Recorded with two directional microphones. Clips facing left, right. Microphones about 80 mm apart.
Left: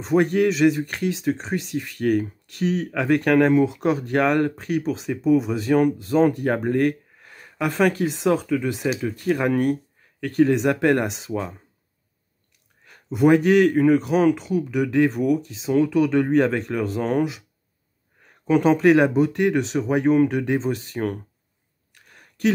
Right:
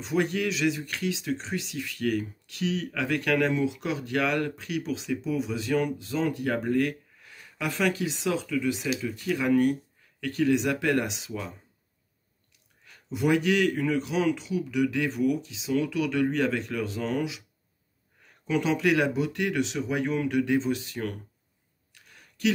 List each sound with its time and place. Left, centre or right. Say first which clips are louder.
0.0 s speech: left 8 dB; left
12.8 s speech: left 8 dB; left
21.9 s a sound: left 4 dB; left